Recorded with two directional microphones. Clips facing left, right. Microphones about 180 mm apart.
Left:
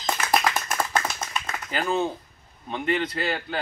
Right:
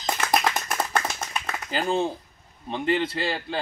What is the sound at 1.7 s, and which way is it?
Speech, 30° right (ahead or behind).